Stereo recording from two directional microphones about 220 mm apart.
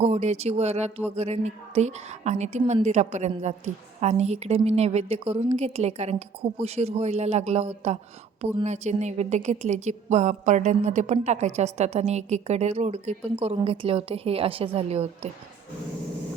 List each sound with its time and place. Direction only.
0.0 s a woman's voice: 30° right (ahead or behind)